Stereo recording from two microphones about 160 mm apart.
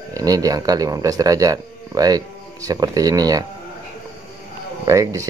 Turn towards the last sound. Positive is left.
turn(degrees=-20)  # may be behind; listen again after turning